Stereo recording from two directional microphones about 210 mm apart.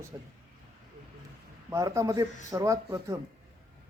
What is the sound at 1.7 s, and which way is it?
Speech, 15° right (ahead or behind).